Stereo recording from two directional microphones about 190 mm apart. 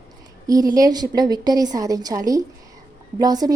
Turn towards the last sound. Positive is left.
turn(degrees=-20)  # may be behind; listen again after turning